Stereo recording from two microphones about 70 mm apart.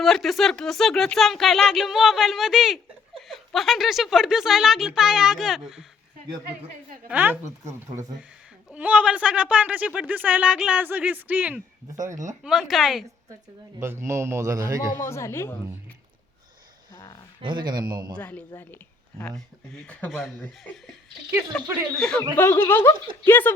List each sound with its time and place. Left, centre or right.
0.0 s speech: centre
7.1 s speech: right
8.7 s speech: centre
12.0 s a man's voice: right
12.4 s speech: centre
13.7 s a man's voice: right
15.0 s speech: left
17.5 s speech: right
18.2 s speech: left
19.7 s speech: centre
20.1 s speech: centre
21.9 s a man's voice: centre
22.4 s speech: left